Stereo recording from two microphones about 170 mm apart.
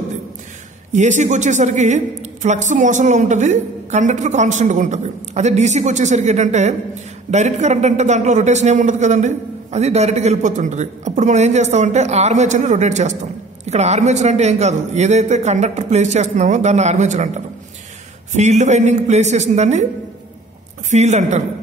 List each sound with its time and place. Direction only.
0.9 s a man's voice: 45° right (ahead or behind)
18.3 s a man's voice: 45° right (ahead or behind)
20.9 s a man's voice: 40° right (ahead or behind)